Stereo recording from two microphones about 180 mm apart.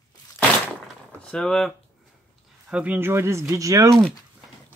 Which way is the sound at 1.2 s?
5° left (ahead or behind).